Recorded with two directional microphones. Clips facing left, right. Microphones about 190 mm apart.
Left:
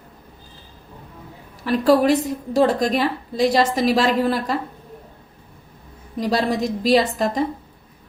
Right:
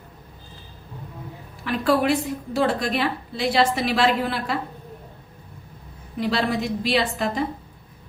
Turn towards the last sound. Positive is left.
turn(degrees=40)  # may be behind; listen again after turning